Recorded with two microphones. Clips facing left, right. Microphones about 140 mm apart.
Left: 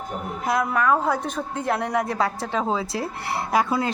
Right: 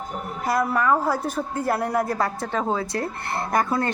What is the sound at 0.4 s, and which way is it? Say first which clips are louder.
Speech: even; 5° right (ahead or behind).